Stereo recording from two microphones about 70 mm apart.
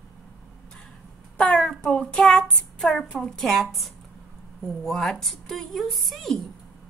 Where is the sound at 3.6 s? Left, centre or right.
Centre.